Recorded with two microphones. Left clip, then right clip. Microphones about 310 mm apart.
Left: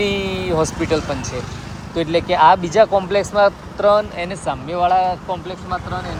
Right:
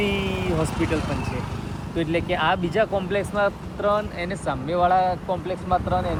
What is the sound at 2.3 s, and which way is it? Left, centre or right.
Speech, centre.